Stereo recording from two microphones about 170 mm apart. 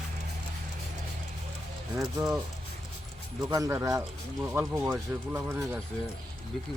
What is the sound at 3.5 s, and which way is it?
Speech, 15° right (ahead or behind).